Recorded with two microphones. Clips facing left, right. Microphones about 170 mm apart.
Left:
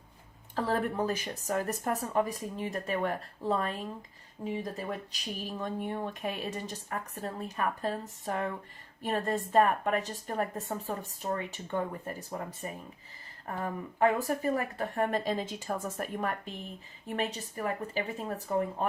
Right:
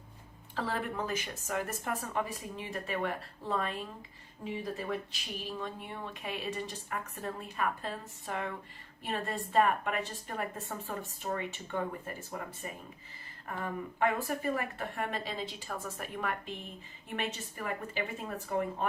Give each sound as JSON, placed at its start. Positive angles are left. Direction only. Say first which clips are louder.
{"t": 0.5, "sound": "a woman's voice", "louder": "left 5 dB", "side_deg": 40}